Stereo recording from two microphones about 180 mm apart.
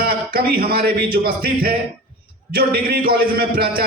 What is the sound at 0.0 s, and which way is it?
A man's voice, 55° right (ahead or behind).